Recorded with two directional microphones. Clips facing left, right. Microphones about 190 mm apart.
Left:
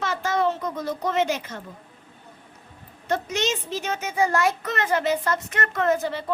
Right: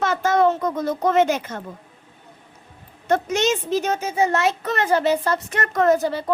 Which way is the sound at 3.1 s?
50° right (ahead or behind).